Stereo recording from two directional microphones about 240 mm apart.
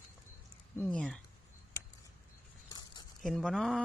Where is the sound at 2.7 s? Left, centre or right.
Centre.